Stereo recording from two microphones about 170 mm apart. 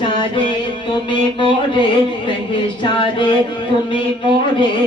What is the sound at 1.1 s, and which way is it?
Speech, 30° left (ahead or behind).